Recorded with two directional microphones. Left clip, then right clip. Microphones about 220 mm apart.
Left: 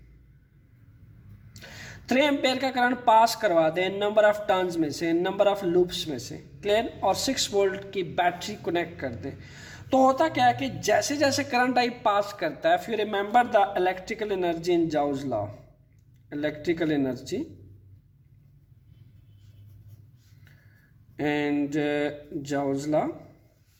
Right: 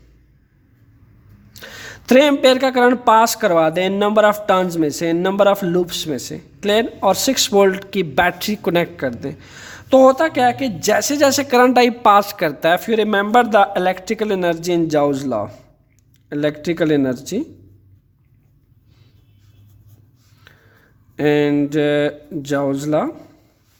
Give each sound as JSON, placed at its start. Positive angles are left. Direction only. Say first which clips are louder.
{"t": 1.5, "sound": "speech", "louder": "right 9 dB", "side_deg": -40}
{"t": 20.5, "sound": "a sound", "louder": "right 12 dB", "side_deg": -40}
{"t": 21.2, "sound": "speech", "louder": "right 11 dB", "side_deg": -40}